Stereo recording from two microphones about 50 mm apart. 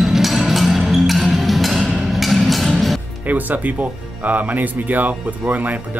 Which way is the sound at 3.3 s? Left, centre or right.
Right.